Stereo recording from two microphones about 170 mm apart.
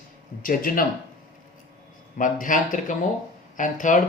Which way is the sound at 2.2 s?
50° left (ahead or behind).